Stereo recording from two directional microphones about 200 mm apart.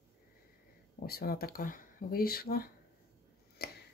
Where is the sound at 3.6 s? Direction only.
50° left (ahead or behind).